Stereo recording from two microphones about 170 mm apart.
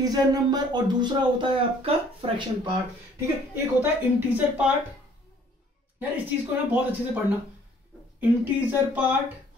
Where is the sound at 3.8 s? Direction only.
10° right (ahead or behind).